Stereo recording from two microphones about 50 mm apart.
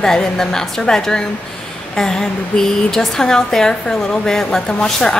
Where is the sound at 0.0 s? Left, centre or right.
Centre.